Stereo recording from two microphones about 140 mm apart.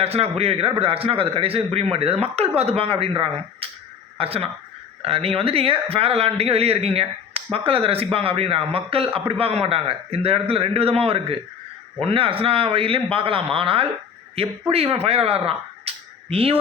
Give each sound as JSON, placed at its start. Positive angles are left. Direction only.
{"t": 0.0, "sound": "a man's voice", "side_deg": -45}